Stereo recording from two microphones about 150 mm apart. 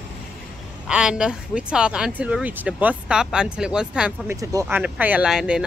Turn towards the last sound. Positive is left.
turn(degrees=-5)  # may be behind; listen again after turning